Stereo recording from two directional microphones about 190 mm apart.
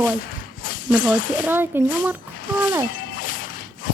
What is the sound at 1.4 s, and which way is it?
Speech, 10° right (ahead or behind).